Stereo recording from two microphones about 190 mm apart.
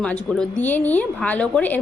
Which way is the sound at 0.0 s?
5° left (ahead or behind).